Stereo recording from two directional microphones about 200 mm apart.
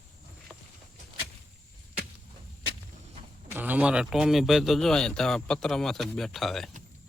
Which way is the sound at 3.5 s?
10° right (ahead or behind).